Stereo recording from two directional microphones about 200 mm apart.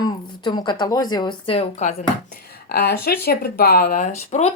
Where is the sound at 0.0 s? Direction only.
20° left (ahead or behind).